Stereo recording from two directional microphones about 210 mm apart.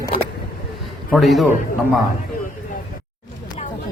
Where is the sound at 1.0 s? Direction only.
Centre (ahead or behind).